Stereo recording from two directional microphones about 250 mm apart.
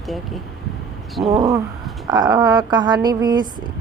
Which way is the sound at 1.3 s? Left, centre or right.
Right.